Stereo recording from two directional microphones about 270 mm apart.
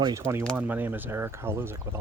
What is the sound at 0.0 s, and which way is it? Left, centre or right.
Speech, centre.